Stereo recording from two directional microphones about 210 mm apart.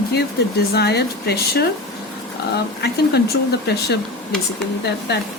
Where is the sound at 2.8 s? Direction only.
50° left (ahead or behind).